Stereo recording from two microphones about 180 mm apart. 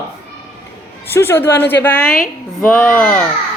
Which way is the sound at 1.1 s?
15° left (ahead or behind).